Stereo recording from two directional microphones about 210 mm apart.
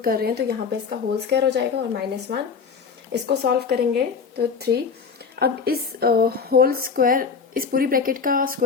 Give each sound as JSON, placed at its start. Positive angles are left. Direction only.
{"t": 0.0, "sound": "speech", "side_deg": -45}